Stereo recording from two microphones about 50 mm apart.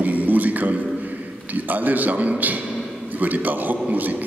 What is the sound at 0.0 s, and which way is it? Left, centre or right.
Music, right.